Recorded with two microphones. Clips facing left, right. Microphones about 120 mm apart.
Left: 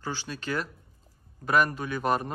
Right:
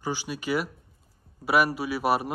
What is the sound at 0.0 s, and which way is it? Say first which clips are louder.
A man's voice: right 4 dB; 15° right (ahead or behind).